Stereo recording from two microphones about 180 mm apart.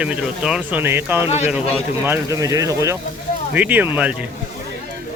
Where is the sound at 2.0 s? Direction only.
15° right (ahead or behind).